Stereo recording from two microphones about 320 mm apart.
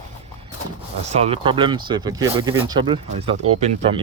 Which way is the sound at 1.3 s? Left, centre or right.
Centre.